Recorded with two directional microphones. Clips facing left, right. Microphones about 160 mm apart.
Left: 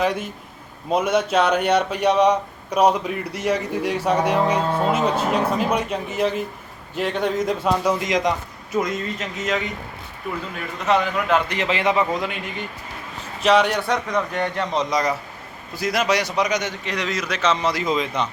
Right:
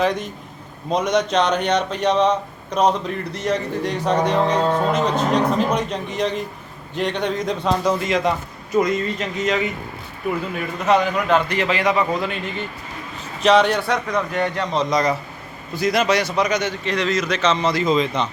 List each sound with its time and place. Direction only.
0.0 s speech: 10° left (ahead or behind)
8.7 s speech: centre (ahead or behind)
10.8 s speech: centre (ahead or behind)
11.4 s a man's voice: 20° left (ahead or behind)